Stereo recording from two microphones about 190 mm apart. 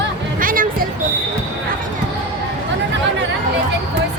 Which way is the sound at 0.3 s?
45° right (ahead or behind).